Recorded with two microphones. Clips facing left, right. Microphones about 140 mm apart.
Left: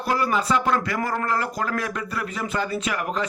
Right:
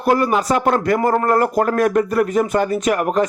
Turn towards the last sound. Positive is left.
turn(degrees=-50)  # may be behind; listen again after turning